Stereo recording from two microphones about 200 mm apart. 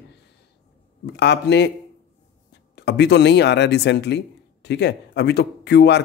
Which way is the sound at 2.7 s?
60° left (ahead or behind).